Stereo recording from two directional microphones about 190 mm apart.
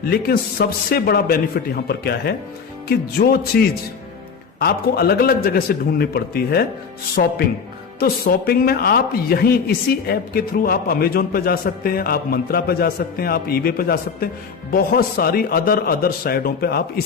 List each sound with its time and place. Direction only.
0.0 s a man's voice: 55° left (ahead or behind)
4.6 s a man's voice: 55° left (ahead or behind)
7.9 s a man's voice: 55° left (ahead or behind)